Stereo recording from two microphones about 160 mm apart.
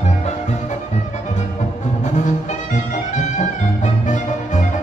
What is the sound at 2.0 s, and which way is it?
Music, 50° left (ahead or behind).